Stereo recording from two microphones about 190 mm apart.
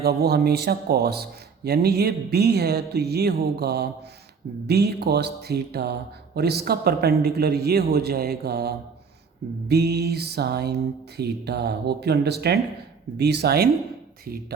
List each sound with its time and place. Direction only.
0.0 s speech: 55° right (ahead or behind)